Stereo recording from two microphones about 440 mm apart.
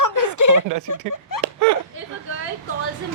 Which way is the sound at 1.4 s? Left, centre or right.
Right.